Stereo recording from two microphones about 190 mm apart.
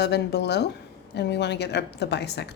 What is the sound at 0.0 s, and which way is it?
Speech, 60° left (ahead or behind).